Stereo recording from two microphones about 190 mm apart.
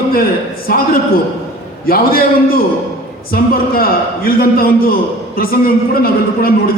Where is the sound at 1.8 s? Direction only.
50° left (ahead or behind).